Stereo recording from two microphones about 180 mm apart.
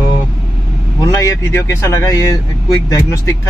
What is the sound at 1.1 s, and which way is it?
Speech, 20° left (ahead or behind).